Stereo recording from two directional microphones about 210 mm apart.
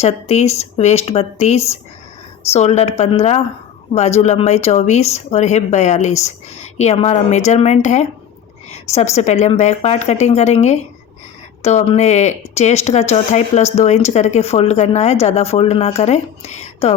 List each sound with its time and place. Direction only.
0.0 s speech: 30° left (ahead or behind)
11.9 s speech: 30° left (ahead or behind)